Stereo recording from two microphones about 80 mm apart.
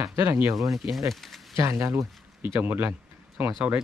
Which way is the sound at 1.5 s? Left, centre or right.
Right.